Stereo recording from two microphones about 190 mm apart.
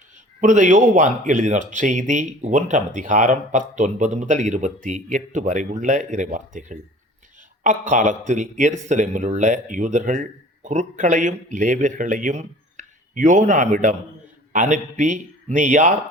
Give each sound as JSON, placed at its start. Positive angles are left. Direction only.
{"t": 0.4, "sound": "speech", "side_deg": -40}